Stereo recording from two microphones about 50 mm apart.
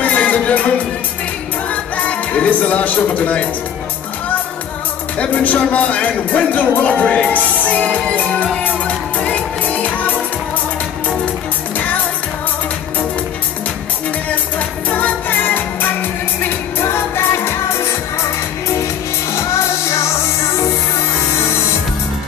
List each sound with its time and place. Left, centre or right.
0.0 s music: left
1.7 s music: left
5.2 s speech: left
8.8 s music: left
14.9 s music: left
16.8 s music: left
19.3 s music: left